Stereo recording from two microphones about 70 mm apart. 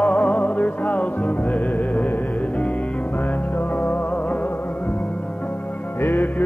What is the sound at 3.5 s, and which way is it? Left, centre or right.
Music, left.